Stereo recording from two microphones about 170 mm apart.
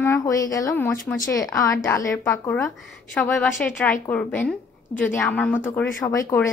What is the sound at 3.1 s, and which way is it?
A woman's voice, 5° left (ahead or behind).